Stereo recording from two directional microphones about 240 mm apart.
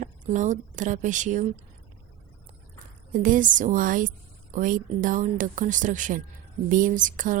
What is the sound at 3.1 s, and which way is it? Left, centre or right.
Speech, right.